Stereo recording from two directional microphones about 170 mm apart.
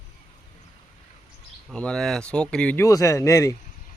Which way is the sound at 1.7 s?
5° left (ahead or behind).